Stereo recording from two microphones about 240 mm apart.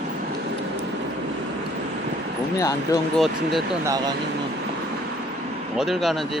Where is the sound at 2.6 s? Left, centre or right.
Centre.